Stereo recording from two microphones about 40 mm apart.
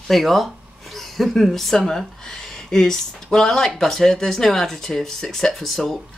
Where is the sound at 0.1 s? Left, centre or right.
Centre.